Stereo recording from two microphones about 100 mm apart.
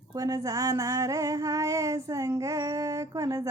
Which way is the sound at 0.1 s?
35° right (ahead or behind).